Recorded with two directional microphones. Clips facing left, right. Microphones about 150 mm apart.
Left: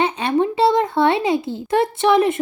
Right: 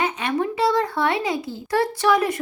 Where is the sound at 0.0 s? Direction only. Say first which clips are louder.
Left 5 dB; 30° left (ahead or behind).